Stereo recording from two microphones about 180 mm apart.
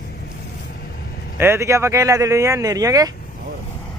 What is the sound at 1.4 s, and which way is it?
Speech, 15° right (ahead or behind).